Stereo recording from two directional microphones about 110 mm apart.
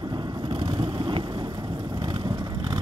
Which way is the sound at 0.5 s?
45° right (ahead or behind).